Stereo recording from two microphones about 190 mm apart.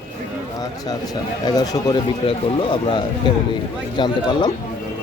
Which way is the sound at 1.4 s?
20° left (ahead or behind).